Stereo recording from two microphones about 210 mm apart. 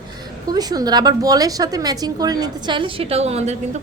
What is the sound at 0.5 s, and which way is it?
A woman's voice, 20° right (ahead or behind).